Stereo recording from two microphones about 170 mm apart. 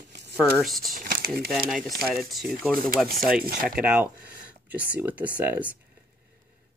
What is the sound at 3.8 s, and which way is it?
Speech, 5° right (ahead or behind).